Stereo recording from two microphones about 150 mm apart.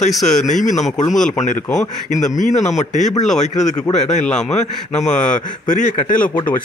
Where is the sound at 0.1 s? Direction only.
Centre (ahead or behind).